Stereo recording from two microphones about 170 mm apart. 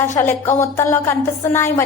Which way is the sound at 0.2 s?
15° left (ahead or behind).